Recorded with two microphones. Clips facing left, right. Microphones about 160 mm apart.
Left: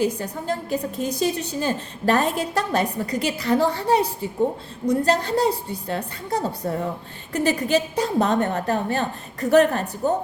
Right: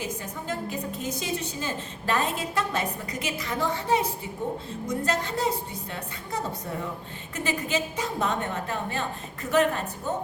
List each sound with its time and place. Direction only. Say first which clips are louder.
0.0 s a woman's voice: left 10 dB; 35° left (ahead or behind)